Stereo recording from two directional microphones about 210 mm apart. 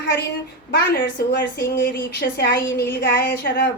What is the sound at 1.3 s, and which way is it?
Speech, 50° left (ahead or behind).